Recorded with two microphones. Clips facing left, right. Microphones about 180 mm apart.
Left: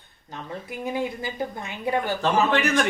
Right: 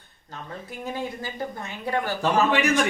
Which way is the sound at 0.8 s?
15° left (ahead or behind).